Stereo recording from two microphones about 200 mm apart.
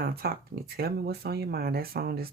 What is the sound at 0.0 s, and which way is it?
Speech, 50° right (ahead or behind).